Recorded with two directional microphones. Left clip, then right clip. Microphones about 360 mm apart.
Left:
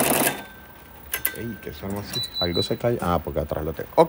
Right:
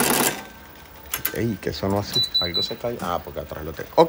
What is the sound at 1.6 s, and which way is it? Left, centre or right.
Speech, centre.